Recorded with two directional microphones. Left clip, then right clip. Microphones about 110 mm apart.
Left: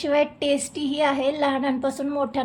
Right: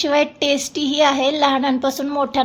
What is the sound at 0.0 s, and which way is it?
A woman's voice, 30° right (ahead or behind).